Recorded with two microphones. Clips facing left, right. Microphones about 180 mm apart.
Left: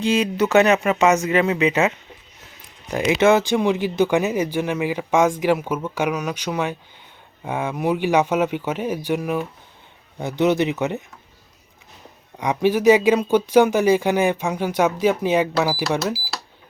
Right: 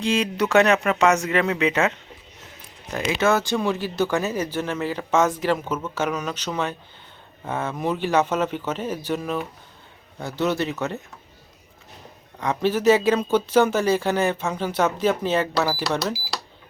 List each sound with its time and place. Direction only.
0.0 s speech: 5° left (ahead or behind)
2.9 s speech: 15° left (ahead or behind)
12.4 s speech: 15° left (ahead or behind)